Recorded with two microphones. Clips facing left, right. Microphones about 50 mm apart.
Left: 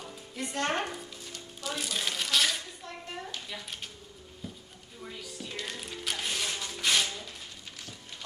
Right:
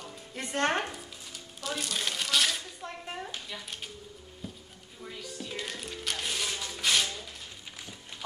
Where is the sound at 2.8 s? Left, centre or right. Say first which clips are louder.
Right 2 dB; right.